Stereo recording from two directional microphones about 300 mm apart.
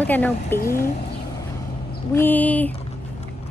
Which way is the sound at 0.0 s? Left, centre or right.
Centre.